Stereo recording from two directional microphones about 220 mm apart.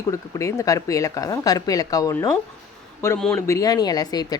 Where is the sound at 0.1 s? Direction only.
15° left (ahead or behind).